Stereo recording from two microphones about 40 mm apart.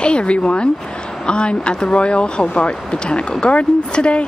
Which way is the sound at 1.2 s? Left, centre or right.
Left.